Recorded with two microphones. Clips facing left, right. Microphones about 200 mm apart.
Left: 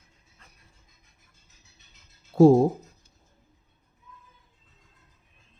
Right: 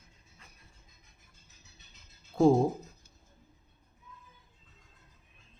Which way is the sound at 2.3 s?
40° left (ahead or behind).